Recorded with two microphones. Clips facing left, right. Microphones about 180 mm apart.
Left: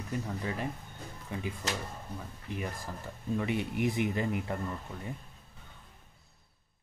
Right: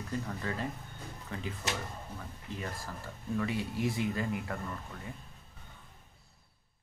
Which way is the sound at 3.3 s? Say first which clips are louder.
Left 2 dB; 20° left (ahead or behind).